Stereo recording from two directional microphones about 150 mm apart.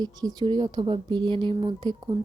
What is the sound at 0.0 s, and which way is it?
Speech, 25° right (ahead or behind).